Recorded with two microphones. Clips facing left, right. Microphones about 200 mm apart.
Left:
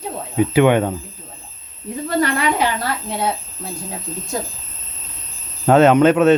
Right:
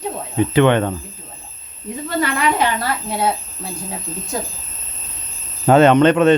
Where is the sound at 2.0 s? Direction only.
40° left (ahead or behind).